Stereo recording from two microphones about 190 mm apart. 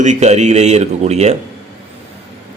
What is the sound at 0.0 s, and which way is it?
A man's voice, 35° right (ahead or behind).